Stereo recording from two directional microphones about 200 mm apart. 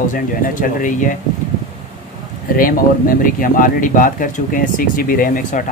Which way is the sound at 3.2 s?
45° left (ahead or behind).